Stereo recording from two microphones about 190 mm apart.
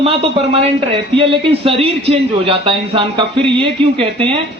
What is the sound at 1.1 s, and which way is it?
A man's voice, 30° right (ahead or behind).